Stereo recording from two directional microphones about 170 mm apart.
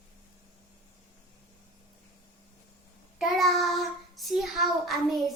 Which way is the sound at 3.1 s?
Centre (ahead or behind).